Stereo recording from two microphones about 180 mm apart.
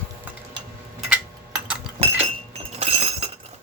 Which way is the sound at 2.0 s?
35° right (ahead or behind).